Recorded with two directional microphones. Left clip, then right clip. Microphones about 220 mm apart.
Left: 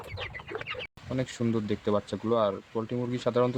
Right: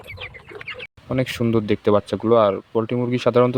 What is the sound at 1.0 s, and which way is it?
Speech, 35° right (ahead or behind).